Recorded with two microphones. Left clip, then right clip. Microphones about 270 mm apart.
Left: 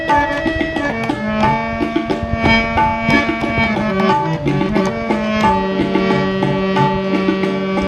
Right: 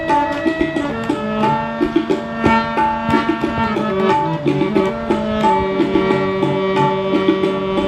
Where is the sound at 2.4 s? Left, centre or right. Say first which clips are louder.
Left 1 dB; left.